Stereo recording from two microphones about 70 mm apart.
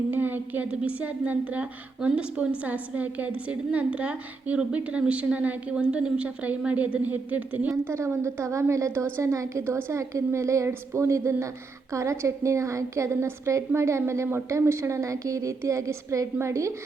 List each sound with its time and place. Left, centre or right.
0.1 s a woman's voice: right
7.9 s a woman's voice: right